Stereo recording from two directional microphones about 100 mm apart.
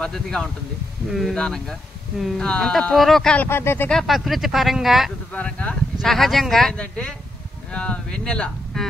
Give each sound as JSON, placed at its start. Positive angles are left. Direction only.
{"t": 0.0, "sound": "speech", "side_deg": 5}
{"t": 3.3, "sound": "speech", "side_deg": 25}
{"t": 3.9, "sound": "speech", "side_deg": 0}
{"t": 5.3, "sound": "speech", "side_deg": 15}
{"t": 5.9, "sound": "speech", "side_deg": 0}